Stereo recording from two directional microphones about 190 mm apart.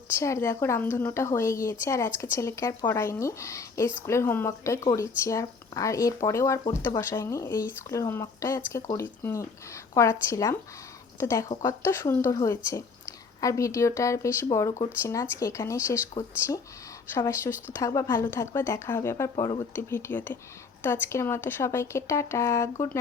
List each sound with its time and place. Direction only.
0.1 s speech: 15° left (ahead or behind)